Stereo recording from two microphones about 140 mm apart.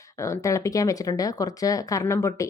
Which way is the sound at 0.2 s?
20° left (ahead or behind).